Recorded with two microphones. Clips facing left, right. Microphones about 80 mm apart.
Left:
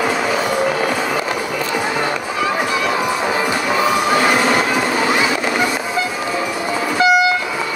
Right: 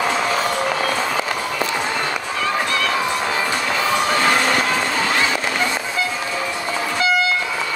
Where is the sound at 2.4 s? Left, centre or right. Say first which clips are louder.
Left 2 dB; centre.